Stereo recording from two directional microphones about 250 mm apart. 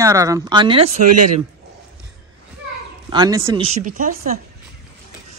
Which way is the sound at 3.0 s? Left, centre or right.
Centre.